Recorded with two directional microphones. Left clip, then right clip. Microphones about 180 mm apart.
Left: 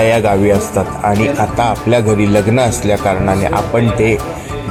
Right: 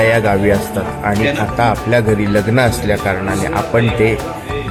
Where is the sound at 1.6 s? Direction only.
25° left (ahead or behind).